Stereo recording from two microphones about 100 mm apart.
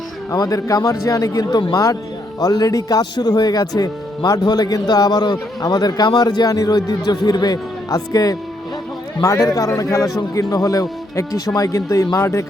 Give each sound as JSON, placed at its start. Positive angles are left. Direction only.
{"t": 0.3, "sound": "speech", "side_deg": 40}